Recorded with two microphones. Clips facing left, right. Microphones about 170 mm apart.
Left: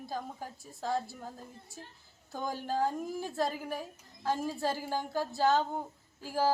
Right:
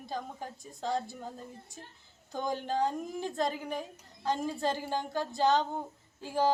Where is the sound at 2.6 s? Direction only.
5° left (ahead or behind).